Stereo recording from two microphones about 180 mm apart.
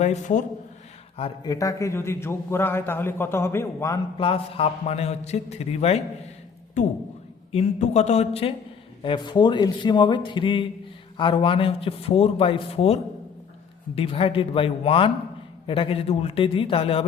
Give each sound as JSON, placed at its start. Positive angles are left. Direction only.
{"t": 0.0, "sound": "a man's voice", "side_deg": 40}
{"t": 1.5, "sound": "a man's voice", "side_deg": 20}
{"t": 4.2, "sound": "a man's voice", "side_deg": 30}
{"t": 7.5, "sound": "a man's voice", "side_deg": 35}